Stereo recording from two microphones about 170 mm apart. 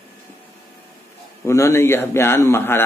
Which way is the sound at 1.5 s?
15° left (ahead or behind).